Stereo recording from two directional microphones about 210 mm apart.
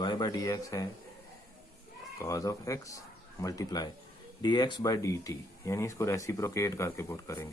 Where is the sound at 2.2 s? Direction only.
15° left (ahead or behind).